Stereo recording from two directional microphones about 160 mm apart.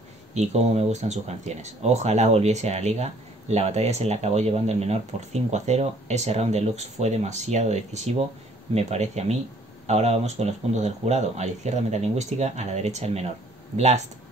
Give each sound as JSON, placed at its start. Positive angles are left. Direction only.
{"t": 0.3, "sound": "speech", "side_deg": -45}